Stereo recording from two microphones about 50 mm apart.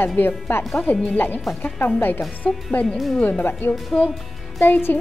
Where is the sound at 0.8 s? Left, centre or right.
Left.